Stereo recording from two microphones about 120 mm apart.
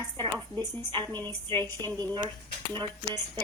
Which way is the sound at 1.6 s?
30° right (ahead or behind).